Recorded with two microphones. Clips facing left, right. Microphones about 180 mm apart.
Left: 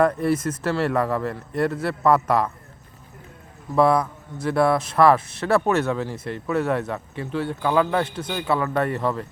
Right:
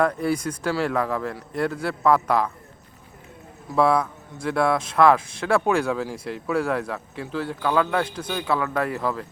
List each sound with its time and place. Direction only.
0.0 s speech: centre (ahead or behind)
3.8 s speech: centre (ahead or behind)